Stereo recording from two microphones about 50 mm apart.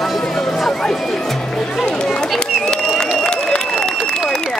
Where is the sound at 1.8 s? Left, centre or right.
Centre.